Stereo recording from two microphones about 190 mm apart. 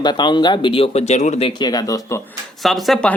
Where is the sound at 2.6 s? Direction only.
Centre (ahead or behind).